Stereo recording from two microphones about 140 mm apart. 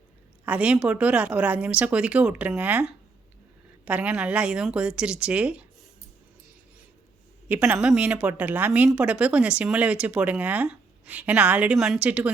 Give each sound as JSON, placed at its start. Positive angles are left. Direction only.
{"t": 0.4, "sound": "speech", "side_deg": -10}
{"t": 7.4, "sound": "speech", "side_deg": -10}